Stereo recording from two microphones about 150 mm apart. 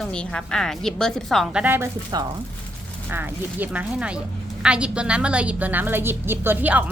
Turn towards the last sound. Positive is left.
turn(degrees=-10)  # may be behind; listen again after turning